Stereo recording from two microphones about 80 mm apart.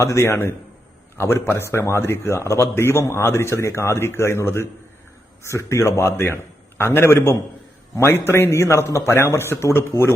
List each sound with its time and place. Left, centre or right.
0.0 s speech: left